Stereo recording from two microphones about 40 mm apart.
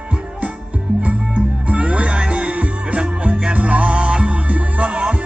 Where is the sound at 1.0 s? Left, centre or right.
Right.